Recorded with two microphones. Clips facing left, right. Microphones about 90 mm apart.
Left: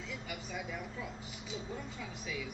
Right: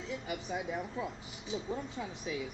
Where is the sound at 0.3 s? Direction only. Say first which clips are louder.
Right 6 dB; 30° right (ahead or behind).